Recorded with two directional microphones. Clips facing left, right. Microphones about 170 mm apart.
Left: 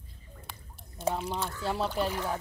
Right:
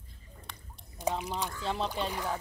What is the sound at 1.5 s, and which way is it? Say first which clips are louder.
Speech: left 2 dB; 5° left (ahead or behind).